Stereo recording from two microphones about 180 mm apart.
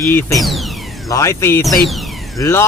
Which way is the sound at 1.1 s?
15° left (ahead or behind).